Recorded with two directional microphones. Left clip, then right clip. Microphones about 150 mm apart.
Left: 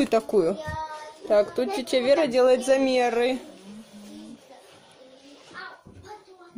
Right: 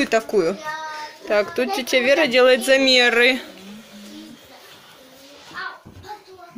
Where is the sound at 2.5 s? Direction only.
5° right (ahead or behind).